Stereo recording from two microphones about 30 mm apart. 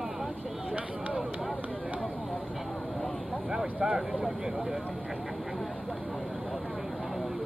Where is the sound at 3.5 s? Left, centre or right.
Right.